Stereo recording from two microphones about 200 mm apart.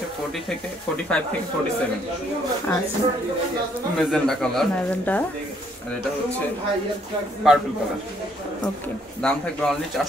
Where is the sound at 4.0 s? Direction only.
Centre (ahead or behind).